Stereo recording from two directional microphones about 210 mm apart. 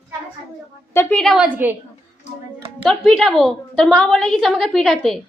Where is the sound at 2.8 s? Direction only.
Centre (ahead or behind).